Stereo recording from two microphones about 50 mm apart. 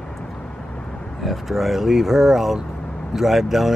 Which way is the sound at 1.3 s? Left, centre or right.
Centre.